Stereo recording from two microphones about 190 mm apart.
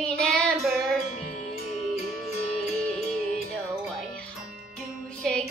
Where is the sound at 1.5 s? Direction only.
30° left (ahead or behind).